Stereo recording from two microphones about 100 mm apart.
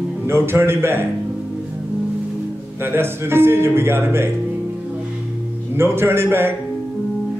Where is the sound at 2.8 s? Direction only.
25° right (ahead or behind).